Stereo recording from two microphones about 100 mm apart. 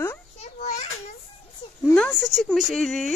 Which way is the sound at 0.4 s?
90° left.